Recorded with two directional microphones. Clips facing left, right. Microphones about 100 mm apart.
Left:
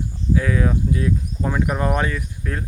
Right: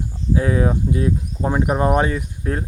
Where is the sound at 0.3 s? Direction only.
30° right (ahead or behind).